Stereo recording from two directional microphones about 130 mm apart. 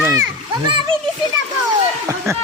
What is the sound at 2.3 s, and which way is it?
Speech, 20° right (ahead or behind).